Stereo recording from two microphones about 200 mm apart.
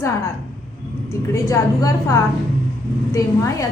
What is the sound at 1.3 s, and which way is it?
A woman's voice, 15° left (ahead or behind).